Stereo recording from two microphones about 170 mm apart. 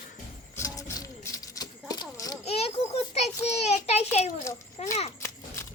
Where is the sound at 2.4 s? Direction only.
35° left (ahead or behind).